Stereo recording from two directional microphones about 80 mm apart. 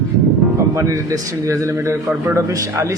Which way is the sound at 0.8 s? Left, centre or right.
Right.